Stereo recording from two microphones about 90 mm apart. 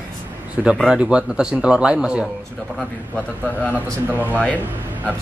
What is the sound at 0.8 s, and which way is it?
Speech, 10° right (ahead or behind).